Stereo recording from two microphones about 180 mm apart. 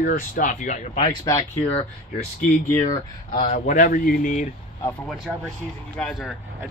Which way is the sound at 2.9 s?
30° left (ahead or behind).